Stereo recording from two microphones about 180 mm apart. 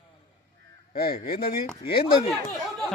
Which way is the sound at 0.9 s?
55° left (ahead or behind).